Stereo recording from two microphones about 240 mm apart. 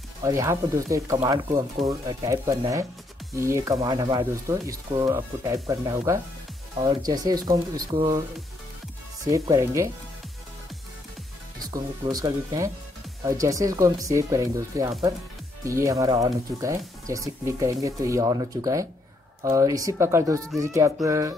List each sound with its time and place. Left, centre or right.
0.2 s speech: centre
9.3 s speech: centre
11.7 s speech: centre